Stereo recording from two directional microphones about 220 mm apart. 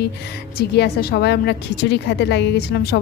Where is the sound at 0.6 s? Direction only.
45° left (ahead or behind).